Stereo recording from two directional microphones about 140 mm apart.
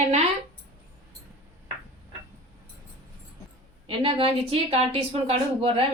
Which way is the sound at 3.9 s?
40° right (ahead or behind).